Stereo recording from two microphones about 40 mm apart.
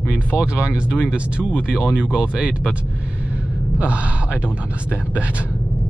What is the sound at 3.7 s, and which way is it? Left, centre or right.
Speech, right.